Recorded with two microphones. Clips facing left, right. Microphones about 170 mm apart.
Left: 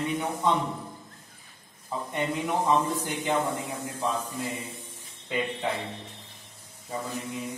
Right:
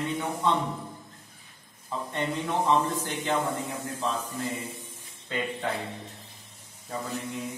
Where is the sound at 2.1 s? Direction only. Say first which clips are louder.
Left 1 dB; 10° left (ahead or behind).